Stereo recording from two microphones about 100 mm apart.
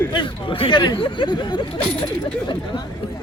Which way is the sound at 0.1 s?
55° left (ahead or behind).